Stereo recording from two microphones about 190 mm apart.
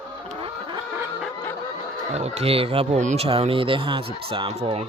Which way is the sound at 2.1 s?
35° right (ahead or behind).